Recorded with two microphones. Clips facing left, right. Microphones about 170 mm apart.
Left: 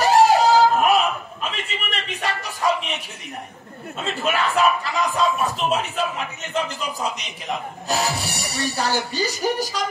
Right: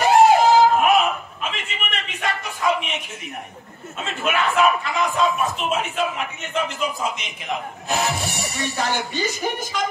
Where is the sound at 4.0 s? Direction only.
35° left (ahead or behind).